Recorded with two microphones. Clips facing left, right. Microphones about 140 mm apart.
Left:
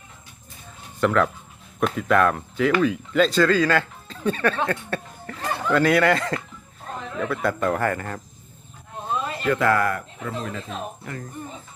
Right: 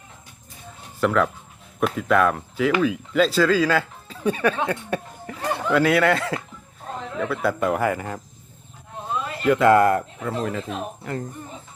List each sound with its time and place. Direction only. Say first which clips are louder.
1.0 s speech: even; 5° right (ahead or behind)
9.4 s speech: right 6 dB; 20° right (ahead or behind)